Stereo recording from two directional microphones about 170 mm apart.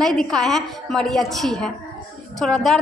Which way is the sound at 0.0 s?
5° left (ahead or behind).